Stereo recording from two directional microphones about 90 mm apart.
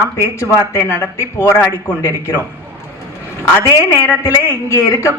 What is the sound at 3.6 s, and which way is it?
Speech, 35° left (ahead or behind).